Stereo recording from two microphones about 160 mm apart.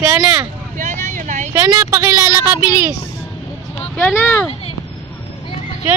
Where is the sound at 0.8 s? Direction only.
55° right (ahead or behind).